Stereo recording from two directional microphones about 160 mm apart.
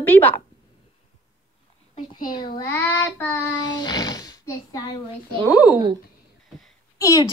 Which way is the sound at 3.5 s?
25° left (ahead or behind).